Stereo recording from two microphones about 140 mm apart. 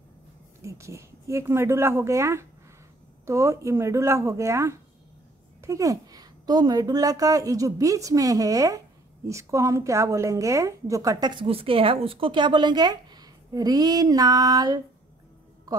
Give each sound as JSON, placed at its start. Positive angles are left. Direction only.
{"t": 0.6, "sound": "a woman's voice", "side_deg": -20}